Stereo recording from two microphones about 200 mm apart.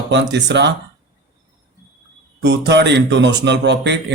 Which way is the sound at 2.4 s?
60° right (ahead or behind).